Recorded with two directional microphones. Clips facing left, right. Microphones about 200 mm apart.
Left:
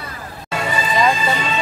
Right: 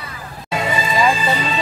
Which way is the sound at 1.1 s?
35° right (ahead or behind).